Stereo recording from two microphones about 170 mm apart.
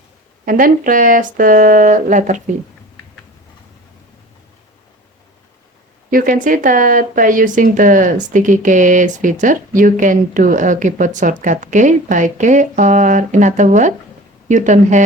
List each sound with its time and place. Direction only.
0.4 s speech: 55° right (ahead or behind)
6.1 s speech: 55° right (ahead or behind)